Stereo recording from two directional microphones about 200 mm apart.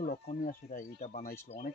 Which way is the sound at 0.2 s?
40° left (ahead or behind).